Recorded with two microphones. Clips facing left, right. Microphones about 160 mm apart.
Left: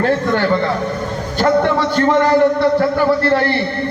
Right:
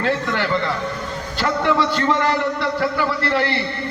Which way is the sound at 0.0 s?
45° left (ahead or behind).